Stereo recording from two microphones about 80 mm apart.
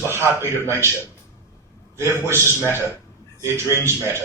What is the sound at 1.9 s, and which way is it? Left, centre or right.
A man's voice, right.